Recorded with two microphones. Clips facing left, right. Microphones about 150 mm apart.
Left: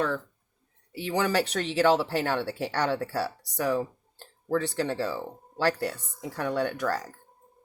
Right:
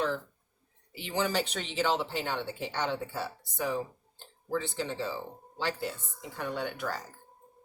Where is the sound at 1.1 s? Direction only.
70° left (ahead or behind).